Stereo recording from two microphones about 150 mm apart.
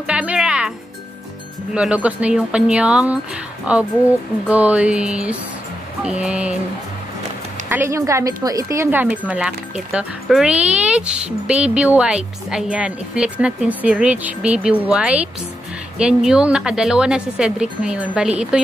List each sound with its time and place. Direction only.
0.0 s music: 5° right (ahead or behind)
1.7 s speech: 5° right (ahead or behind)
7.7 s a woman's voice: 15° right (ahead or behind)
9.0 s a woman's voice: 5° right (ahead or behind)